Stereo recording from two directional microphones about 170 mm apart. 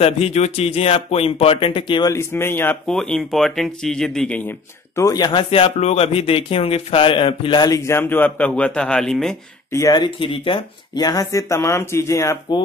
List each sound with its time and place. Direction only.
0.0 s speech: 40° left (ahead or behind); by 9.4 s 5° left (ahead or behind)
9.7 s speech: 20° left (ahead or behind)